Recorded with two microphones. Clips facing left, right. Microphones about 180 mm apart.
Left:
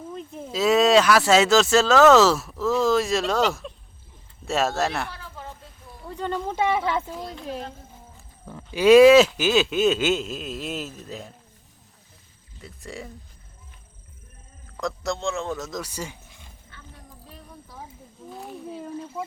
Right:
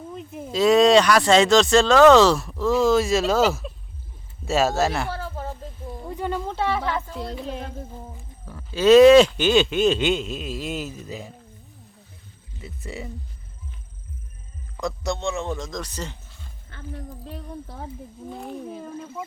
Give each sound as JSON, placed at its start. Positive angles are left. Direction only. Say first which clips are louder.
{"t": 0.1, "sound": "livestock", "louder": "right 1 dB", "side_deg": -5}
{"t": 0.5, "sound": "speech", "louder": "right 3 dB", "side_deg": 5}
{"t": 5.1, "sound": "a sound", "louder": "right 9 dB", "side_deg": -45}
{"t": 6.1, "sound": "a sound", "louder": "right 1 dB", "side_deg": -10}
{"t": 6.6, "sound": "speech", "louder": "left 3 dB", "side_deg": 20}
{"t": 8.4, "sound": "speech", "louder": "even", "side_deg": 15}
{"t": 12.6, "sound": "speech", "louder": "right 2 dB", "side_deg": -5}
{"t": 14.8, "sound": "speech", "louder": "right 1 dB", "side_deg": 0}
{"t": 16.7, "sound": "speech", "louder": "right 12 dB", "side_deg": -60}
{"t": 18.3, "sound": "speech", "louder": "right 3 dB", "side_deg": 0}